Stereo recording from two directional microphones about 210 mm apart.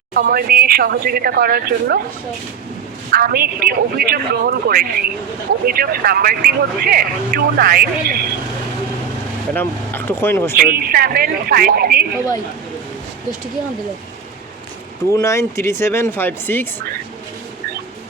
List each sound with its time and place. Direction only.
0.1 s speech: 50° right (ahead or behind)
3.1 s speech: 45° right (ahead or behind)
9.6 s speech: 10° left (ahead or behind)
10.5 s speech: 45° right (ahead or behind)
15.1 s speech: 15° left (ahead or behind)